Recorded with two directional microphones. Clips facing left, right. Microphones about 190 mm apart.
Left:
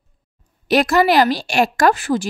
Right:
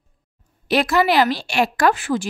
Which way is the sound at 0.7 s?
45° left (ahead or behind).